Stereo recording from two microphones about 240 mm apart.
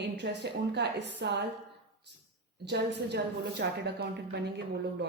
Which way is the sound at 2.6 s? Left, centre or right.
Right.